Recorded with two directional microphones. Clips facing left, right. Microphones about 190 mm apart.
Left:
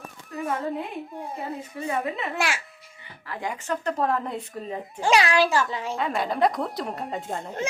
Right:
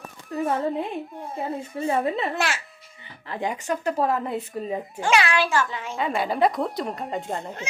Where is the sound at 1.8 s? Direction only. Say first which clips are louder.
Right 5 dB; 35° right (ahead or behind).